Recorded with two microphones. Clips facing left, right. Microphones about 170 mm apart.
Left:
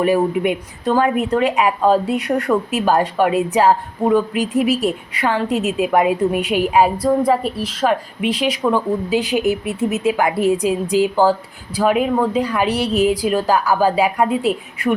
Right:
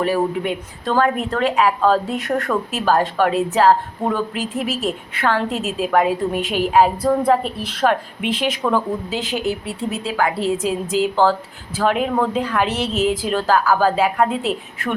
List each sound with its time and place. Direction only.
0.0 s speech: 15° left (ahead or behind)
4.4 s a woman's voice: centre (ahead or behind)
4.7 s a woman's voice: 15° left (ahead or behind)